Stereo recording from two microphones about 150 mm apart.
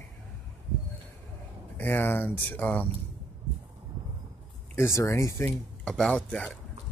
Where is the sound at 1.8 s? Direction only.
10° left (ahead or behind).